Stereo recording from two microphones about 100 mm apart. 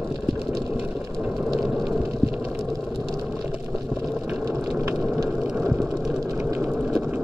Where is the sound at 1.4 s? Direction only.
5° right (ahead or behind).